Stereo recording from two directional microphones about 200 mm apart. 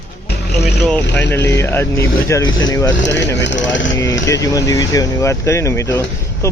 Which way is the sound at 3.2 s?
60° left (ahead or behind).